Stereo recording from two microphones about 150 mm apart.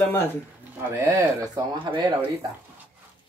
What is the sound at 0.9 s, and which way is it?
Speech, 20° right (ahead or behind).